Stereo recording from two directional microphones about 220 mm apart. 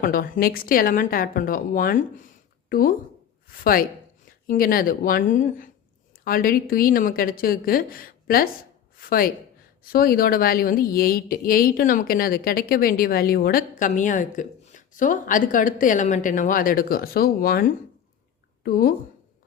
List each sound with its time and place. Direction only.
0.0 s a woman's voice: 40° left (ahead or behind)